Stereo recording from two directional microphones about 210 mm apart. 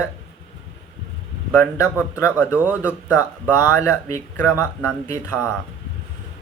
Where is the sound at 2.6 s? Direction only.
5° right (ahead or behind).